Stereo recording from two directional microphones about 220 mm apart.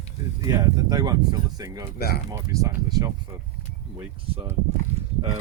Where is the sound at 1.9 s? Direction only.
45° left (ahead or behind).